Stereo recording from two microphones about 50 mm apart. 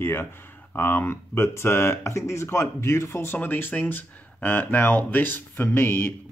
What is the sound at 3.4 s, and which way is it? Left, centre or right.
Speech, left.